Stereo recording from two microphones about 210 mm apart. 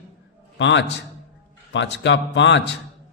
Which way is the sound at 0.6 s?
55° left (ahead or behind).